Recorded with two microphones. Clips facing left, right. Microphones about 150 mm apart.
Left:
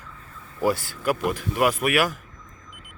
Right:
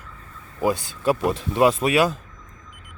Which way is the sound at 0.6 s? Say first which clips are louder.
Right 1 dB; 20° right (ahead or behind).